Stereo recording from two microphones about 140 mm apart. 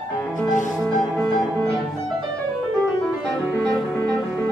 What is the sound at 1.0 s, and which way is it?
Music, 5° left (ahead or behind).